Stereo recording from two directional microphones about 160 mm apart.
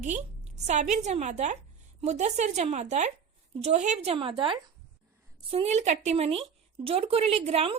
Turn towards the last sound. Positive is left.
turn(degrees=-40)  # may be behind; listen again after turning